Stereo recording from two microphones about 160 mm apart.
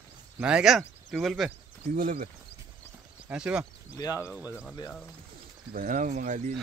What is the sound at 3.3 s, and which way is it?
Speech, 5° right (ahead or behind).